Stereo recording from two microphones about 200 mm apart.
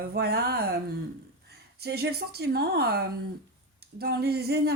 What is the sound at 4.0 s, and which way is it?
Speech, 55° right (ahead or behind).